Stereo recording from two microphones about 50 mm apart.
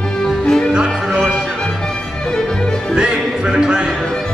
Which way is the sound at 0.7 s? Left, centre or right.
Centre.